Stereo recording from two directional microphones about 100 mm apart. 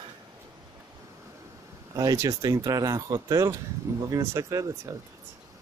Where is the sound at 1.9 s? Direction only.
35° right (ahead or behind).